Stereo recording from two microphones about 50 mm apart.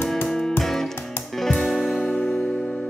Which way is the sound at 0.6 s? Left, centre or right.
Centre.